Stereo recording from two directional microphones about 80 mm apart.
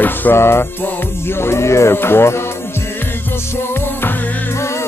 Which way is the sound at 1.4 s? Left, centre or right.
Left.